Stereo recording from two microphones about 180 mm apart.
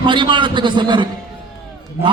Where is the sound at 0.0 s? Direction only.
25° right (ahead or behind).